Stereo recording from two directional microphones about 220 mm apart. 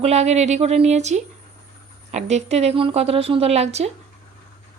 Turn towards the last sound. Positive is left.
turn(degrees=-30)  # may be behind; listen again after turning